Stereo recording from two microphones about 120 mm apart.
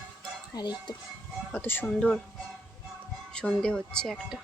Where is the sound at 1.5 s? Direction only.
15° left (ahead or behind).